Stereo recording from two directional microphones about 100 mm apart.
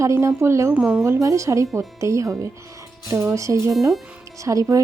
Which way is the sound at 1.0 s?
30° right (ahead or behind).